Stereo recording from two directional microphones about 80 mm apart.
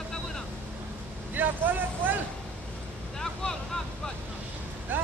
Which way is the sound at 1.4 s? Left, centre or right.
Right.